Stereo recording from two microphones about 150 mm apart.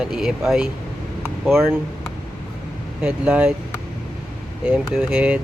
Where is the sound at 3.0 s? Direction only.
10° right (ahead or behind).